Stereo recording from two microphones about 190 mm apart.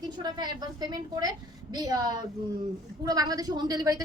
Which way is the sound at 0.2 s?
20° right (ahead or behind).